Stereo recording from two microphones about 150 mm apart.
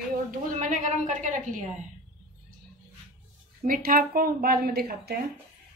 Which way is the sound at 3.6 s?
70° right (ahead or behind).